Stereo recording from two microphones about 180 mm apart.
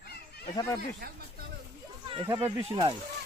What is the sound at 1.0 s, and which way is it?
Speech, 55° right (ahead or behind).